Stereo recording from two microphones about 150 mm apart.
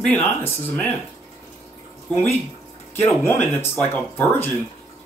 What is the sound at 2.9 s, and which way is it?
Speech, 15° left (ahead or behind).